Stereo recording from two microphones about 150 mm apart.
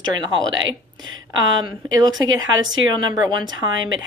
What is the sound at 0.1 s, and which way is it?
A woman's voice, 30° right (ahead or behind).